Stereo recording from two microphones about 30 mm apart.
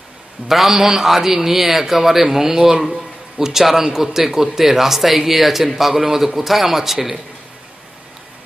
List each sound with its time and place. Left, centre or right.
0.5 s speech: centre
2.9 s a sound: centre
3.6 s speech: centre